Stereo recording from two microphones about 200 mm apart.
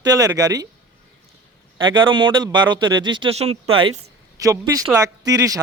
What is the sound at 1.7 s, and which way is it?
A man's voice, 25° right (ahead or behind).